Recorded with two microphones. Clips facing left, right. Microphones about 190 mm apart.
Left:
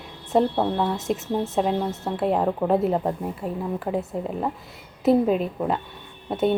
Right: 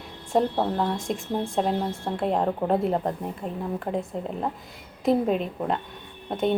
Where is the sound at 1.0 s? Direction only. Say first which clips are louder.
Left 3 dB; 5° left (ahead or behind).